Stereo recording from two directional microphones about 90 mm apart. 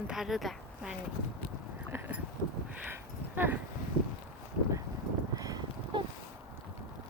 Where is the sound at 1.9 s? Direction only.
30° right (ahead or behind).